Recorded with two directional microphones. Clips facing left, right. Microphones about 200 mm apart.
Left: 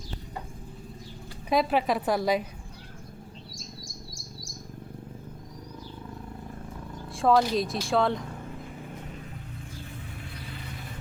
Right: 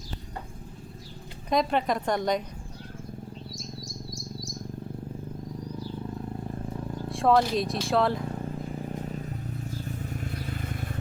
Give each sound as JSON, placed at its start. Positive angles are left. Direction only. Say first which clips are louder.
{"t": 1.5, "sound": "speech", "louder": "left 1 dB", "side_deg": 5}
{"t": 7.1, "sound": "speech", "louder": "even", "side_deg": 0}
{"t": 10.0, "sound": "vehicle", "louder": "right 7 dB", "side_deg": -45}